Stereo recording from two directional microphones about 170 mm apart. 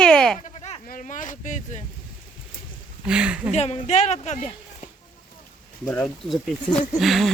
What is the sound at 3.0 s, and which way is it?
Speech, 5° right (ahead or behind).